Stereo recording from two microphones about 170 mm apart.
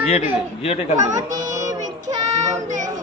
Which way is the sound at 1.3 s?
20° right (ahead or behind).